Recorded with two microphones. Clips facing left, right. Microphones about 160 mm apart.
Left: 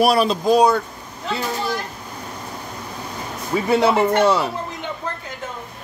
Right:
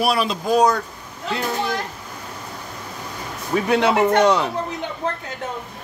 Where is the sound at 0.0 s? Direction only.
35° left (ahead or behind).